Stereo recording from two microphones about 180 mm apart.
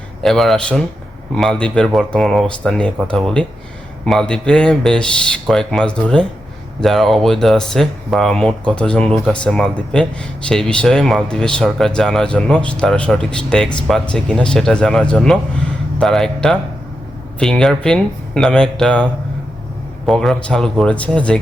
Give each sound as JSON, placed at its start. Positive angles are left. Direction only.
{"t": 0.2, "sound": "speech", "side_deg": 0}
{"t": 20.1, "sound": "speech", "side_deg": 0}